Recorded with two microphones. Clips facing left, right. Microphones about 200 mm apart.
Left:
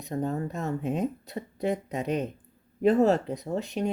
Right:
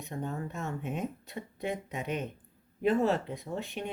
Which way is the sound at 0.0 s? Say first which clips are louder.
Left 7 dB; 35° left (ahead or behind).